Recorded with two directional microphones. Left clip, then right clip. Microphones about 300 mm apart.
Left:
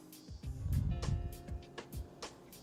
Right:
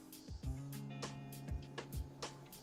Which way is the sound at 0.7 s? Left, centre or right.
Centre.